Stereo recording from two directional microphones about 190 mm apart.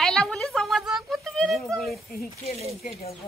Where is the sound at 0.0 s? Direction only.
Centre (ahead or behind).